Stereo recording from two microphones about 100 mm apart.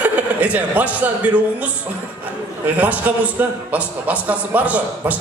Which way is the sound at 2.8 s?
15° right (ahead or behind).